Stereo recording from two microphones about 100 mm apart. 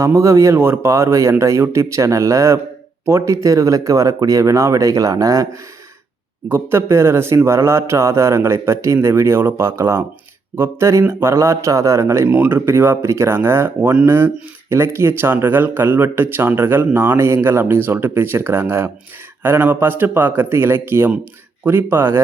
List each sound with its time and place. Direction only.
0.0 s speech: 30° right (ahead or behind)
6.5 s speech: 25° right (ahead or behind)